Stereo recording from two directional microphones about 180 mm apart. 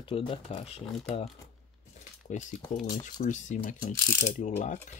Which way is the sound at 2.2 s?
45° left (ahead or behind).